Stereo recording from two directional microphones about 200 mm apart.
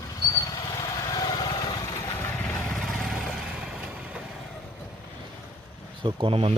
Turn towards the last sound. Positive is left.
turn(degrees=-30)  # may be behind; listen again after turning